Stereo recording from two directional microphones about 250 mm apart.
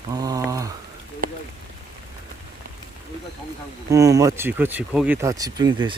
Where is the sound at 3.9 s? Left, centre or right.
Centre.